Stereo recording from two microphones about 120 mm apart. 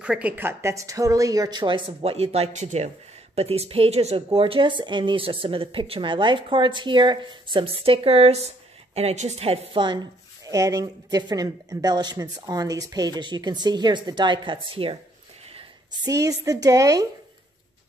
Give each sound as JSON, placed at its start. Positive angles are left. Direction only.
{"t": 0.0, "sound": "speech", "side_deg": -10}
{"t": 3.3, "sound": "a woman's voice", "side_deg": -60}
{"t": 9.8, "sound": "speech", "side_deg": -30}
{"t": 15.9, "sound": "a woman's voice", "side_deg": -30}